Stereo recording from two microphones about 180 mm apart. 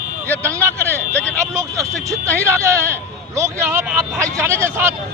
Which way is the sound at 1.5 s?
20° right (ahead or behind).